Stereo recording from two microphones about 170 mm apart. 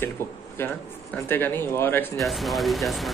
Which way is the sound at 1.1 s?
10° left (ahead or behind).